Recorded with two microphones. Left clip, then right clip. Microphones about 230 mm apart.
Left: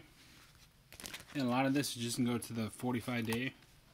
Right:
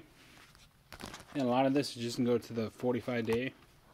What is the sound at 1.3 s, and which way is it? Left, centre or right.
Speech, left.